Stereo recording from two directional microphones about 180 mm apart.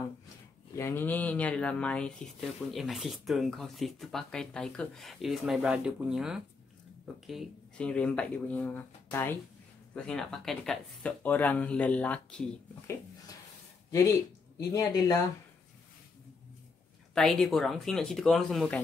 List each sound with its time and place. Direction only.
0.7 s speech: 10° left (ahead or behind)
14.7 s speech: 20° left (ahead or behind)
17.1 s speech: centre (ahead or behind)